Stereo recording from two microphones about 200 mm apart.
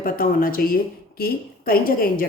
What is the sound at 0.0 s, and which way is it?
A woman's voice, 45° left (ahead or behind).